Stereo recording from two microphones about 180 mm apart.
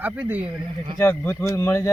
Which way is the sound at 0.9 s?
10° left (ahead or behind).